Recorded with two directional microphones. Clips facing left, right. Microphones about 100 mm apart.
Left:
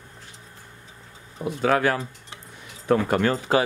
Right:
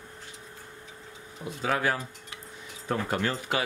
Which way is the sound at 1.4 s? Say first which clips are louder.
Left 7 dB; 70° left (ahead or behind).